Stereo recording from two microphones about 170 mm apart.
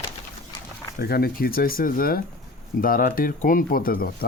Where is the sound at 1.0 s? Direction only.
65° left (ahead or behind).